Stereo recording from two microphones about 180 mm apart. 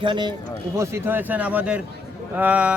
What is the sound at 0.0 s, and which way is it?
Speech, 25° right (ahead or behind).